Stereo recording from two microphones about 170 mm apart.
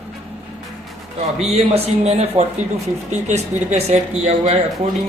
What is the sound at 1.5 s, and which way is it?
Speech, 40° right (ahead or behind).